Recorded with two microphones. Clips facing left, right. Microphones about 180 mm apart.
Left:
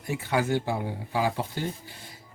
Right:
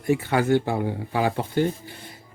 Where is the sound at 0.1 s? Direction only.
60° right (ahead or behind).